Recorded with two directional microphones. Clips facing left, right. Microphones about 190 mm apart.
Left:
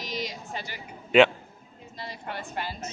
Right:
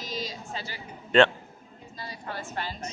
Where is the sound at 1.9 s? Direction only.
25° left (ahead or behind).